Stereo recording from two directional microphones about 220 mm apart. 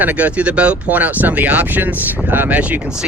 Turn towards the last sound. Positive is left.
turn(degrees=-5)  # may be behind; listen again after turning